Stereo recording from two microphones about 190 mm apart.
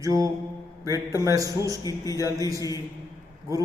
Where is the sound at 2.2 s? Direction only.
15° right (ahead or behind).